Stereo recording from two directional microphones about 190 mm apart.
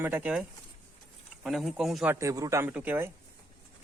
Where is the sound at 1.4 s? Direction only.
Centre (ahead or behind).